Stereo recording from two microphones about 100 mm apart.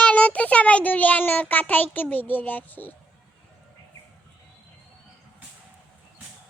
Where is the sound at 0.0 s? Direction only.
15° left (ahead or behind).